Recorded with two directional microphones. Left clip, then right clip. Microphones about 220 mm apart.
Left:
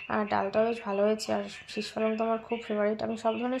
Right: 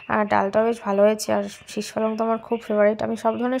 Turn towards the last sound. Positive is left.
turn(degrees=-40)  # may be behind; listen again after turning